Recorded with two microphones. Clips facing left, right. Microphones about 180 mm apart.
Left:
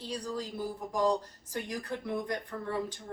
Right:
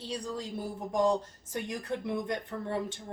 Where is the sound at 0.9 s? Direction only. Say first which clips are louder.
Right 2 dB; 20° right (ahead or behind).